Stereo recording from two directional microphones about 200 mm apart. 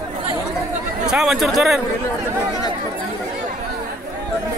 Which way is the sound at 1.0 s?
Centre (ahead or behind).